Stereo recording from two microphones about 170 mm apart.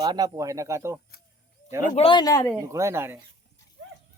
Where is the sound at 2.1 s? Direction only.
25° left (ahead or behind).